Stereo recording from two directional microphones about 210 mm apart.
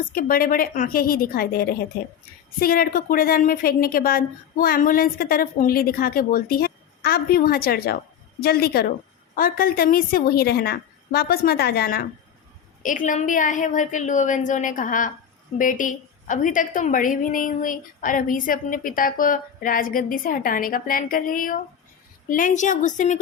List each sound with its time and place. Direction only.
0.0 s a woman's voice: 40° left (ahead or behind)